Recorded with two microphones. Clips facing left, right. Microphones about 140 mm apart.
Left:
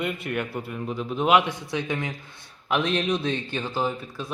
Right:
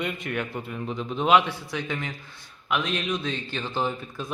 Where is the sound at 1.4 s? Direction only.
20° left (ahead or behind).